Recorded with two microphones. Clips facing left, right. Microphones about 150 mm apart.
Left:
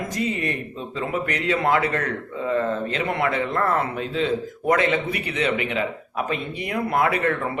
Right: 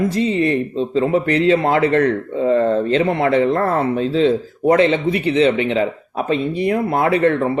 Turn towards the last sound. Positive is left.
turn(degrees=-30)  # may be behind; listen again after turning